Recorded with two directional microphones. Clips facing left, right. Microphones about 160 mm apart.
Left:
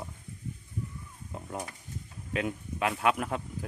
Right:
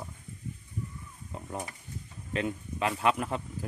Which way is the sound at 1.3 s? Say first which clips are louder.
Even; centre (ahead or behind).